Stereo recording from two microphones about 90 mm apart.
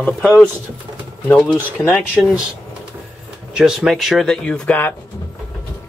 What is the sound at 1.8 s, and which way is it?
Speech, 5° right (ahead or behind).